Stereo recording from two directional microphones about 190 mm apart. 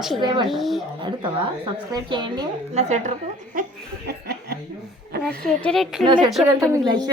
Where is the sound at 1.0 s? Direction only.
25° right (ahead or behind).